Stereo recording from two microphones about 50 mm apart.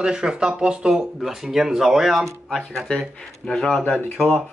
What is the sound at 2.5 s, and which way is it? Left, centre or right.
Speech, centre.